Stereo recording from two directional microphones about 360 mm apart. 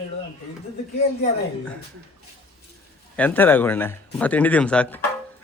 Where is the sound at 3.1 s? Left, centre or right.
Centre.